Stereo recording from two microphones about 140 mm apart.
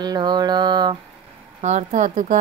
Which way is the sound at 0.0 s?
30° right (ahead or behind).